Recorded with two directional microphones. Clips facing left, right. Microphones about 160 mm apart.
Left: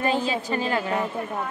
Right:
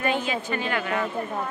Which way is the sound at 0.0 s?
35° left (ahead or behind).